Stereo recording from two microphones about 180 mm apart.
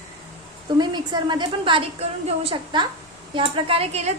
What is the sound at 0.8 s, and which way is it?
A woman's voice, 25° right (ahead or behind).